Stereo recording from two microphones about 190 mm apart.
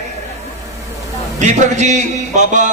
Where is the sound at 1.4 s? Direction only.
40° right (ahead or behind).